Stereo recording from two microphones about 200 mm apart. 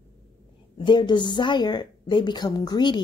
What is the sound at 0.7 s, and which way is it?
Speech, 25° left (ahead or behind).